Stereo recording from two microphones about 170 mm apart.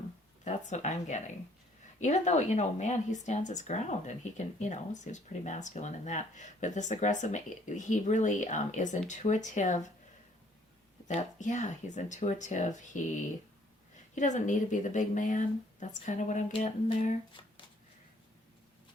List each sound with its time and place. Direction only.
0.4 s speech: 45° left (ahead or behind)
11.1 s speech: 45° left (ahead or behind)